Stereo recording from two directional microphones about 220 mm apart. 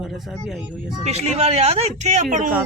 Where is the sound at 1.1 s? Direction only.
30° right (ahead or behind).